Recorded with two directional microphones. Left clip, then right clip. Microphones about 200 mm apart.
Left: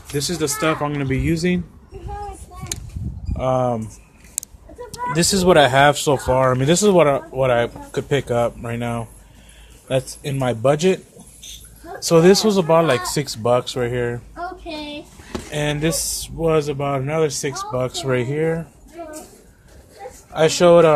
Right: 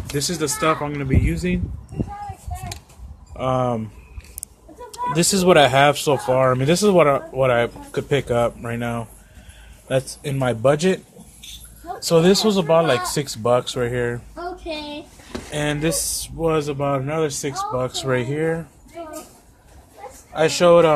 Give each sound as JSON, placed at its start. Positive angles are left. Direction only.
{"t": 0.1, "sound": "speech", "side_deg": 5}
{"t": 0.9, "sound": "speech", "side_deg": 30}
{"t": 3.3, "sound": "speech", "side_deg": 0}
{"t": 4.9, "sound": "speech", "side_deg": 0}
{"t": 12.1, "sound": "speech", "side_deg": 15}
{"t": 15.5, "sound": "speech", "side_deg": 5}
{"t": 20.3, "sound": "speech", "side_deg": 10}